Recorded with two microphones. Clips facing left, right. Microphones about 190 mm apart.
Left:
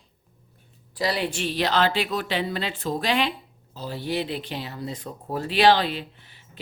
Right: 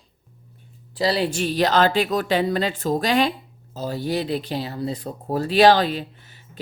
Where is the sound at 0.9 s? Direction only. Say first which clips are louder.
Right 4 dB; 30° right (ahead or behind).